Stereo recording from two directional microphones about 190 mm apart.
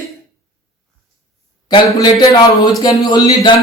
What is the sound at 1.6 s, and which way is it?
Speech, 25° left (ahead or behind).